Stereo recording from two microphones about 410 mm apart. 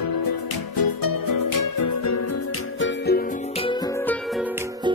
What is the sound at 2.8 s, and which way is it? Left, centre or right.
Music, left.